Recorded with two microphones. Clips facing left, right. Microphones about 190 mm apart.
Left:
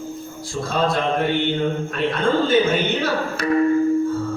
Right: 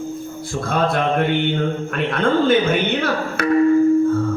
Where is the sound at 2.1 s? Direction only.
55° right (ahead or behind).